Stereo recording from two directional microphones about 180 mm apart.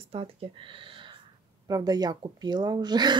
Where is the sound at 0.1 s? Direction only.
30° right (ahead or behind).